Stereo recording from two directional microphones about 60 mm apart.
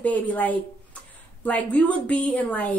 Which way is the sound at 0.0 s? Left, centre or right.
Left.